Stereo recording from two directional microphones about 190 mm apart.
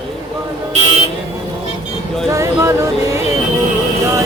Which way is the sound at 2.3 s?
15° right (ahead or behind).